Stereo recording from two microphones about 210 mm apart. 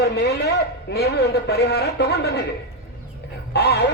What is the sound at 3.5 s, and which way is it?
Speech, 50° left (ahead or behind).